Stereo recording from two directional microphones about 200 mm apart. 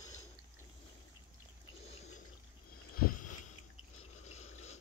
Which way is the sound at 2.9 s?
45° left (ahead or behind).